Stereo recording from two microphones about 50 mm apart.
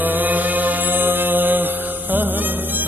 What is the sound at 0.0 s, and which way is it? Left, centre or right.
Music, right.